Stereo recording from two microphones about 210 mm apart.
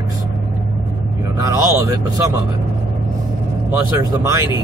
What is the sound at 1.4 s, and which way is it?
Speech, 15° right (ahead or behind).